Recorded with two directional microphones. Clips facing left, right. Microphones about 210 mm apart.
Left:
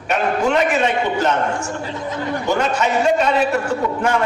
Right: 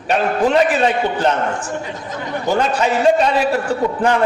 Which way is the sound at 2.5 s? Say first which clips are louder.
Right 3 dB; 35° right (ahead or behind).